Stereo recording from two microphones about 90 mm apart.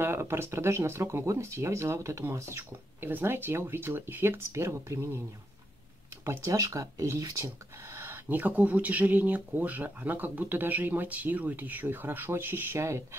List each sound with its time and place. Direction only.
0.0 s speech: 25° right (ahead or behind)
6.2 s speech: 35° right (ahead or behind)